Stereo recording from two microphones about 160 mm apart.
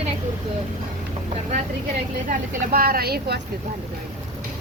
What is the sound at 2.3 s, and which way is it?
A woman's voice, 65° right (ahead or behind).